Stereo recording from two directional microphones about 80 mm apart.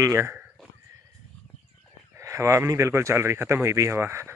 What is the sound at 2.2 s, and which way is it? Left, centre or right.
Speech, right.